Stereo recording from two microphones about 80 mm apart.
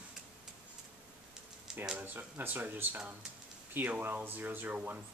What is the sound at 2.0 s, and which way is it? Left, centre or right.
Speech, right.